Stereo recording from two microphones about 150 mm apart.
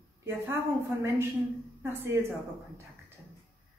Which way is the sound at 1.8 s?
15° right (ahead or behind).